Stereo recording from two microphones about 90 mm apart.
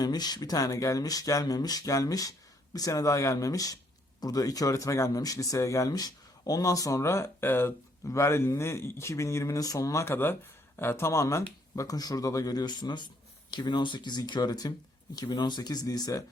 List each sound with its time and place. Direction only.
0.0 s speech: 50° left (ahead or behind)
11.8 s speech: 45° left (ahead or behind)